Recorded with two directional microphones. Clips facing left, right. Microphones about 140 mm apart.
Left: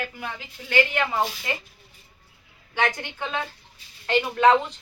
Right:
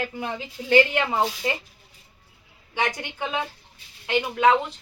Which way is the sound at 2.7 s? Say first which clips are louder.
Left 1 dB; 15° right (ahead or behind).